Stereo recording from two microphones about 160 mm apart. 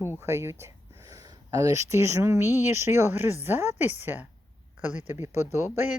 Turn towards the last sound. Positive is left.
turn(degrees=-15)  # may be behind; listen again after turning